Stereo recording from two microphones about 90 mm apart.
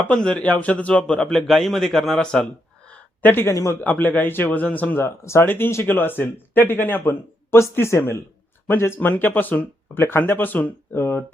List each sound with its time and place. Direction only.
0.0 s a man's voice: 10° left (ahead or behind)
3.5 s a man's voice: 40° left (ahead or behind)
3.8 s speech: 20° left (ahead or behind)